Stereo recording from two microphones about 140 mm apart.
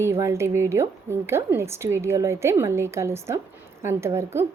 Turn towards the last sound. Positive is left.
turn(degrees=-20)  # may be behind; listen again after turning